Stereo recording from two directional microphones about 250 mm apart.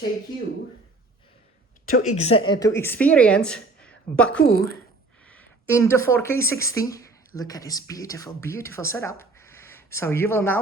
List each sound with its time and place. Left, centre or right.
1.9 s speech: left
2.1 s a woman's voice: left
2.5 s a woman's voice: centre
4.4 s a woman's voice: left
5.2 s speech: centre